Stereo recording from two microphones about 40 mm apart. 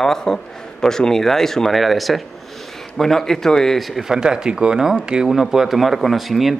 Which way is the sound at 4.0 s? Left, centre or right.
Centre.